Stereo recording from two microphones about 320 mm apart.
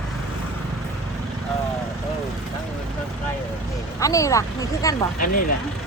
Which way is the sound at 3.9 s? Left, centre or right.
Centre.